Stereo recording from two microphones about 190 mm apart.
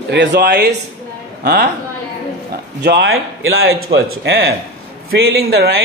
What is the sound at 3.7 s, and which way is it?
Speech, 70° right (ahead or behind).